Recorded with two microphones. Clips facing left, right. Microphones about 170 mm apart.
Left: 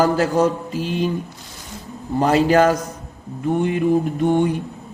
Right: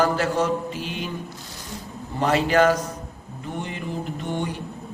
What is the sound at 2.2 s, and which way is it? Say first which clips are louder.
Speech: left 4 dB; 40° left (ahead or behind).